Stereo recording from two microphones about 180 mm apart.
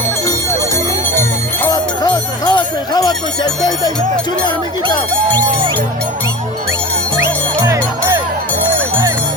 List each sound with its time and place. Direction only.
1.6 s music: 20° left (ahead or behind)
7.2 s music: 15° right (ahead or behind)